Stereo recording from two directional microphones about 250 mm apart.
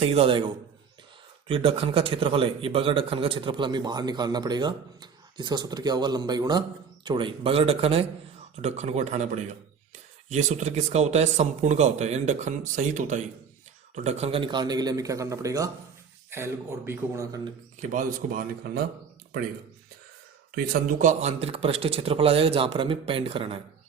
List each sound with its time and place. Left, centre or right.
0.0 s a man's voice: right
17.7 s speech: right
20.6 s a man's voice: right